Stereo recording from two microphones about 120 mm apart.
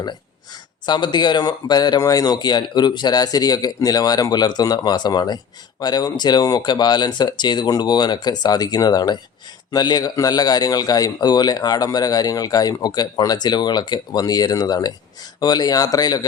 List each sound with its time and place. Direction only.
0.9 s a man's voice: 40° left (ahead or behind)